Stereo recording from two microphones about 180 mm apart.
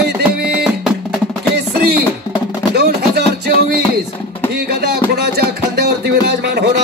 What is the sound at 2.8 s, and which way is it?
Chopping, 65° right (ahead or behind).